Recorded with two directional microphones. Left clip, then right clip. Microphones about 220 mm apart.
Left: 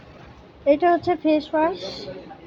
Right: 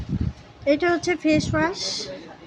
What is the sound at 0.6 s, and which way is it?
A woman's voice, 15° right (ahead or behind).